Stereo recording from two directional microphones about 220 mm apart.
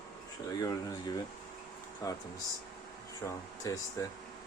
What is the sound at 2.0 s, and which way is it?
Speech, 15° left (ahead or behind).